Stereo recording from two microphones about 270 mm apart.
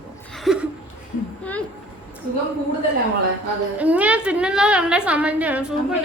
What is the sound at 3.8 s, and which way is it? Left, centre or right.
A woman's voice, centre.